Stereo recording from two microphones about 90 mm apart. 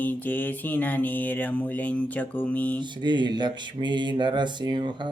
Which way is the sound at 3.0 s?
55° right (ahead or behind).